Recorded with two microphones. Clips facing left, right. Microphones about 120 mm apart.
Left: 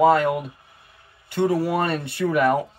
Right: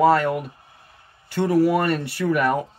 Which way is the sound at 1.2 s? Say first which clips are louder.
Right 3 dB; 25° left (ahead or behind).